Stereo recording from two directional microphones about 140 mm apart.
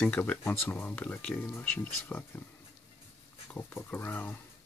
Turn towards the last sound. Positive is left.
turn(degrees=15)  # may be behind; listen again after turning